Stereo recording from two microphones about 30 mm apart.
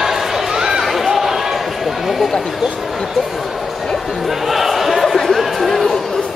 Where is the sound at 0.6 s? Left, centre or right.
Centre.